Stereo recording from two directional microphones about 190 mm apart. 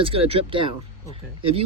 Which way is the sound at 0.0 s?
30° right (ahead or behind).